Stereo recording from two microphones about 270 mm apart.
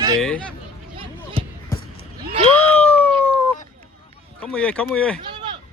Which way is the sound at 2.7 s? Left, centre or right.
Centre.